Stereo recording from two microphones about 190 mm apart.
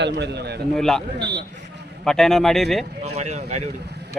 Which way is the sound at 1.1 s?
65° right (ahead or behind).